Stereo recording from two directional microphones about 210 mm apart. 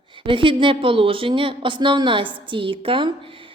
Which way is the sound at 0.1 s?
25° right (ahead or behind).